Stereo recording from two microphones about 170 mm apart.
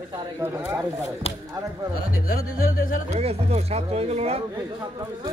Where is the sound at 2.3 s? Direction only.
55° left (ahead or behind).